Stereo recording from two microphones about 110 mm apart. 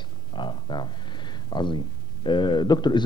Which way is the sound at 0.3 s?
45° left (ahead or behind).